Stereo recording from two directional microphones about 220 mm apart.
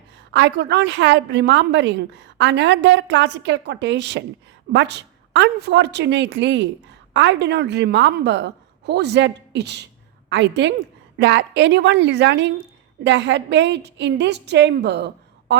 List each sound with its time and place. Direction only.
0.3 s a woman's voice: 55° right (ahead or behind)